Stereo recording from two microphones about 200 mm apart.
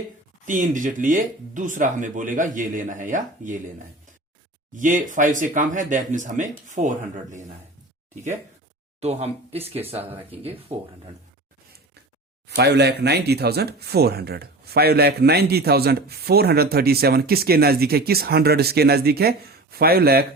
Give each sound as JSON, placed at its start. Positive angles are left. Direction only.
{"t": 0.4, "sound": "speech", "side_deg": -40}
{"t": 4.8, "sound": "speech", "side_deg": -40}
{"t": 9.0, "sound": "speech", "side_deg": -30}
{"t": 12.5, "sound": "speech", "side_deg": -55}